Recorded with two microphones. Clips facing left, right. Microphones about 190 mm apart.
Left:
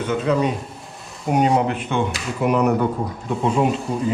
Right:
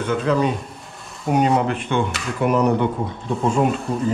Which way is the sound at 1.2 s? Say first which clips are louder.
Even; centre (ahead or behind).